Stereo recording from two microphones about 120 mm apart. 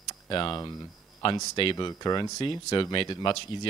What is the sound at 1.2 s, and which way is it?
Speech, 55° left (ahead or behind).